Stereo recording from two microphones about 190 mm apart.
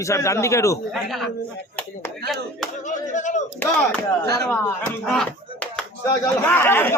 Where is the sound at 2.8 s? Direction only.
40° left (ahead or behind).